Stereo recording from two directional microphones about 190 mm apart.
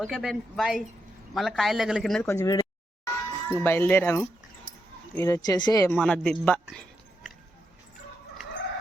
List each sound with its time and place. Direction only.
0.0 s speech: 5° right (ahead or behind)
2.2 s speech: 15° left (ahead or behind)
6.0 s speech: 5° left (ahead or behind)
6.4 s a sound: 5° left (ahead or behind)